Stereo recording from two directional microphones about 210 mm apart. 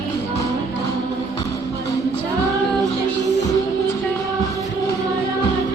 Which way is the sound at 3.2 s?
35° left (ahead or behind).